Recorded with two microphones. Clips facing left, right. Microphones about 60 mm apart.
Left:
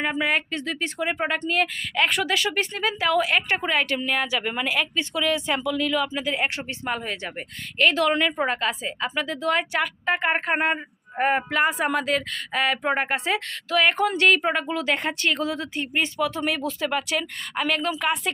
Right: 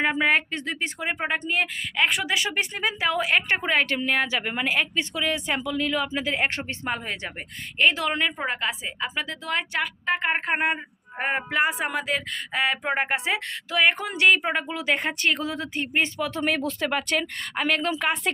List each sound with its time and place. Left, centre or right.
0.0 s a woman's voice: right
0.5 s a woman's voice: right; by 2.3 s centre
2.3 s a woman's voice: centre
7.8 s a woman's voice: centre; by 18.3 s right